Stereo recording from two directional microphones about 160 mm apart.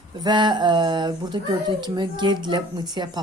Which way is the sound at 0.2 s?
25° right (ahead or behind).